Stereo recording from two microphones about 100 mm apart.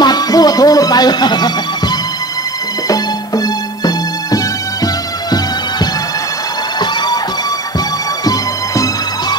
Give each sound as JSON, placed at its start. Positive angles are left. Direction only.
{"t": 0.0, "sound": "music", "side_deg": 40}
{"t": 8.3, "sound": "music", "side_deg": 35}